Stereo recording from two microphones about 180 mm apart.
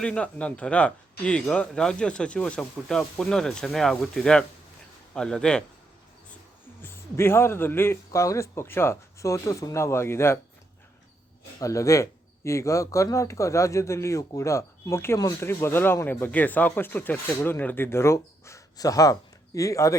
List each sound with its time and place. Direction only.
0.0 s speech: 5° left (ahead or behind)
6.8 s speech: 15° left (ahead or behind)
11.6 s speech: 15° left (ahead or behind)